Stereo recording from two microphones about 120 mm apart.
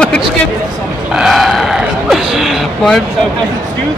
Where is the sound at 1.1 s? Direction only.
5° right (ahead or behind).